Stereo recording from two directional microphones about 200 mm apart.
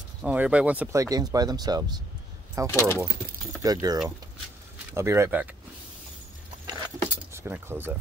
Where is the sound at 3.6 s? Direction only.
20° right (ahead or behind).